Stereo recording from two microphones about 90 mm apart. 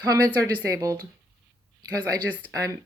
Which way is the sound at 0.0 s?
40° right (ahead or behind).